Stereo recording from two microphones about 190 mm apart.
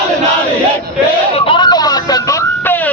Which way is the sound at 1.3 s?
25° left (ahead or behind).